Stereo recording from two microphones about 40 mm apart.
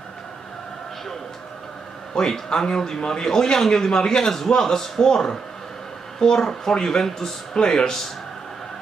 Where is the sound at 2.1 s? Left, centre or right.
Centre.